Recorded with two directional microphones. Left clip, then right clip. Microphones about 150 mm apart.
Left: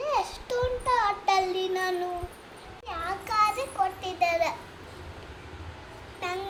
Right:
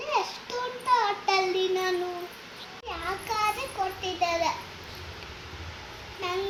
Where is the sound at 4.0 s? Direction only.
25° left (ahead or behind).